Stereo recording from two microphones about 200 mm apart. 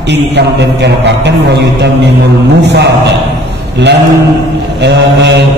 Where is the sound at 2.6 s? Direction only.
60° right (ahead or behind).